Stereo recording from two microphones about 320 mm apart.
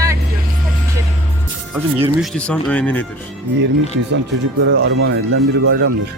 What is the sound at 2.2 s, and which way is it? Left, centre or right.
Speech, centre.